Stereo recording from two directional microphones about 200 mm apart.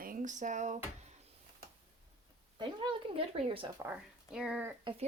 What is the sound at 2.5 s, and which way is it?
Speech, 25° right (ahead or behind).